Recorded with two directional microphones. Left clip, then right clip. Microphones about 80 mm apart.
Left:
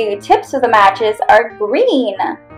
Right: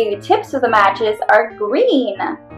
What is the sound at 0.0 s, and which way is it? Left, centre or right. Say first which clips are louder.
Speech: left 3 dB; left.